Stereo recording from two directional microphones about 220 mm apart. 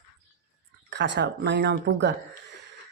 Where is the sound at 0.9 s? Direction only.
55° right (ahead or behind).